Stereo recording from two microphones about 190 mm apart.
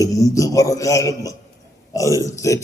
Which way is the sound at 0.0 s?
15° left (ahead or behind).